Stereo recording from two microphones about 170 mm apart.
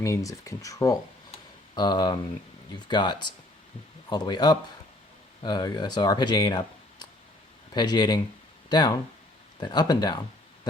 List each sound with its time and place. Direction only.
0.0 s speech: 20° left (ahead or behind)
7.7 s speech: 25° left (ahead or behind)